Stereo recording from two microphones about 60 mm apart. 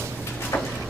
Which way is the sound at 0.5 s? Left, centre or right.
Left.